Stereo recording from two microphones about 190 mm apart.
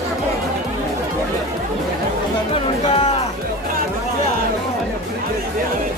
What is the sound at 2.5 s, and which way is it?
Music, 30° left (ahead or behind).